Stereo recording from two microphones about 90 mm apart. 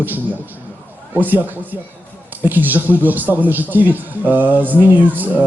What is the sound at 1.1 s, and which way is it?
A man's voice, 20° right (ahead or behind).